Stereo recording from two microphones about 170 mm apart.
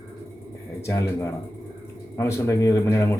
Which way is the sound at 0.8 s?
15° left (ahead or behind).